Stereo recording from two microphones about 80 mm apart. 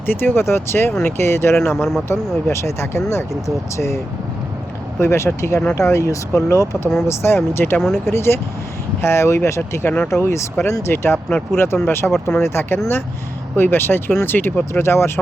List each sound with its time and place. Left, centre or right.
0.0 s speech: left
1.7 s speech: centre
2.0 s speech: left
4.9 s speech: left
10.2 s speech: left